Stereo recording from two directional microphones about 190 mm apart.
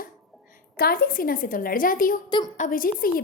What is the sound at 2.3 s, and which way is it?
Speech, 25° left (ahead or behind).